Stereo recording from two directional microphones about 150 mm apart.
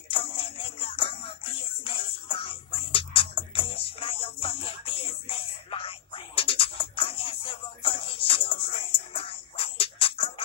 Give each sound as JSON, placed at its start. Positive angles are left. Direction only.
{"t": 0.1, "sound": "music", "side_deg": 35}